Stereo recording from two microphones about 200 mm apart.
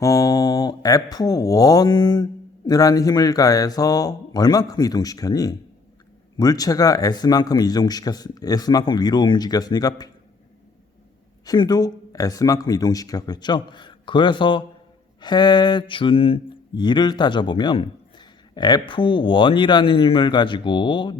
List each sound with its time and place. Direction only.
0.0 s speech: 15° left (ahead or behind)
11.4 s speech: 20° left (ahead or behind)